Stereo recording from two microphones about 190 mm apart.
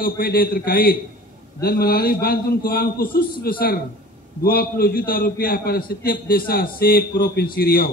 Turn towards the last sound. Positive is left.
turn(degrees=55)  # may be behind; listen again after turning